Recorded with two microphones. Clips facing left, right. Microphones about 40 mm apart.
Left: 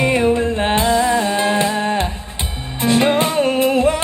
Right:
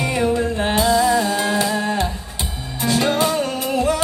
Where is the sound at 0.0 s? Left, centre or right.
Left.